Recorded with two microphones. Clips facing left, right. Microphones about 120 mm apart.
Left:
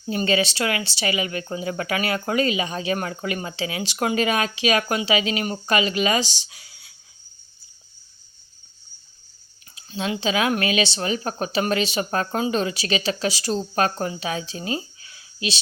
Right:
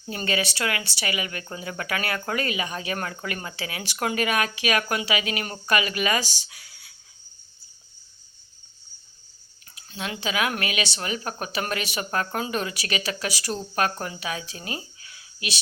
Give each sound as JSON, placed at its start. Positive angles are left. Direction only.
{"t": 0.0, "sound": "speech", "side_deg": 15}
{"t": 9.7, "sound": "speech", "side_deg": 25}